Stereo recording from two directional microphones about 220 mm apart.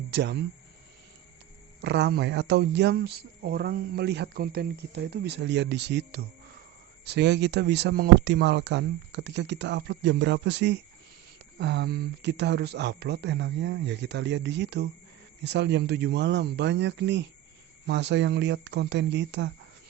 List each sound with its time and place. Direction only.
0.1 s speech: 50° right (ahead or behind)
1.8 s speech: 50° right (ahead or behind)